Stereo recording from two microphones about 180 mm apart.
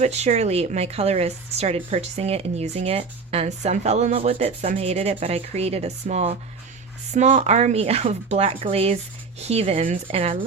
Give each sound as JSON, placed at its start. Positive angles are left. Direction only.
{"t": 0.0, "sound": "a woman's voice", "side_deg": -40}